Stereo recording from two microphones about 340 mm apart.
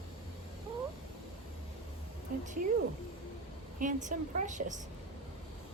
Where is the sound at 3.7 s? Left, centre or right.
Right.